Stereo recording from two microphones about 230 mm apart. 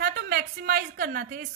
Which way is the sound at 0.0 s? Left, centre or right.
Right.